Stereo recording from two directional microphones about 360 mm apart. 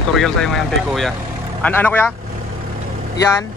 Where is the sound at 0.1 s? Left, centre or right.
Centre.